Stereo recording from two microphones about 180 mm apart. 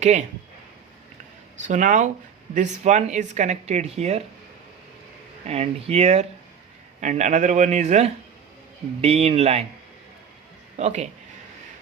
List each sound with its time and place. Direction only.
0.0 s speech: 40° right (ahead or behind)
1.6 s speech: 45° right (ahead or behind)
5.5 s speech: 35° right (ahead or behind)
10.8 s speech: 40° right (ahead or behind)